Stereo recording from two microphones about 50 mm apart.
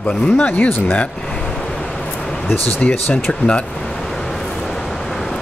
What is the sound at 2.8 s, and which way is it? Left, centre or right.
Speech, left.